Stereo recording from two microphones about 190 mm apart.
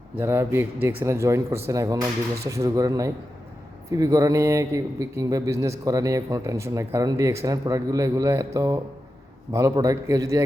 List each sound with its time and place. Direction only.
0.2 s a man's voice: 10° right (ahead or behind)